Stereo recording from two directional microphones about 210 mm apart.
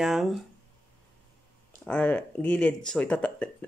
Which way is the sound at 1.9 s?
10° left (ahead or behind).